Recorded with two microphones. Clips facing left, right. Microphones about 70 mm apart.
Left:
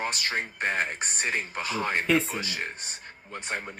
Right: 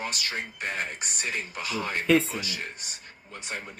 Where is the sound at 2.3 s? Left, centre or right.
Left.